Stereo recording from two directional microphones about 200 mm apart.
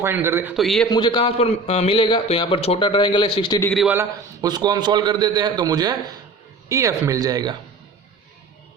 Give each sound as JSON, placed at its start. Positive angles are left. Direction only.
{"t": 0.0, "sound": "speech", "side_deg": -10}
{"t": 0.5, "sound": "a man's voice", "side_deg": 0}
{"t": 0.9, "sound": "a man's voice", "side_deg": 20}
{"t": 3.6, "sound": "a man's voice", "side_deg": 5}
{"t": 3.8, "sound": "a man's voice", "side_deg": -15}